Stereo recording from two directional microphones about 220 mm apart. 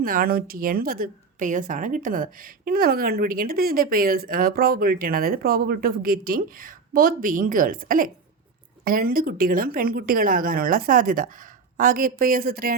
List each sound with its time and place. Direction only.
0.0 s a woman's voice: 40° right (ahead or behind)